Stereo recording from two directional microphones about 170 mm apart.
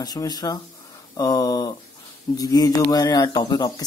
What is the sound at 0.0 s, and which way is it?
Speech, 25° left (ahead or behind).